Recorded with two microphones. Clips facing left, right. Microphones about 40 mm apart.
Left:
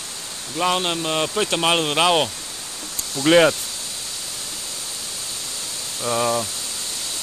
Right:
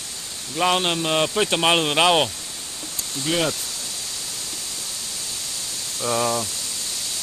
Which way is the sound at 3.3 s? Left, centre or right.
Left.